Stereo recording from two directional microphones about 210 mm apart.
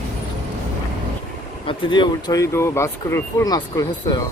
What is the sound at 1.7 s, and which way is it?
Speech, 20° left (ahead or behind).